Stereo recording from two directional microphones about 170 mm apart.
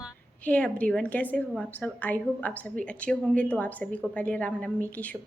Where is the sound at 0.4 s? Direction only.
5° left (ahead or behind).